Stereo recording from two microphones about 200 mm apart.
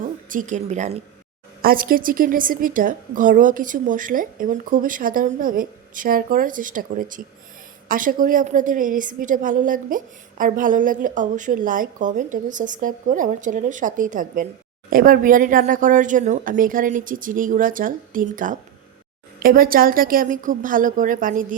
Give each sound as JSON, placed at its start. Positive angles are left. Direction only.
{"t": 0.0, "sound": "a woman's voice", "side_deg": -40}